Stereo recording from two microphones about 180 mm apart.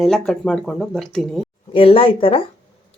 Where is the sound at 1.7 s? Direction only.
30° left (ahead or behind).